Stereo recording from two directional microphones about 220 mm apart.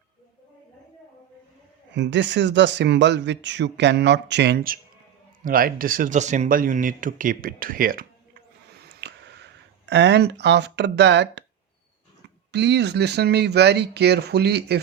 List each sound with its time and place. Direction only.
1.9 s speech: 55° right (ahead or behind)
9.0 s a sound: 50° right (ahead or behind)
9.8 s speech: 50° right (ahead or behind)
12.5 s speech: 50° right (ahead or behind)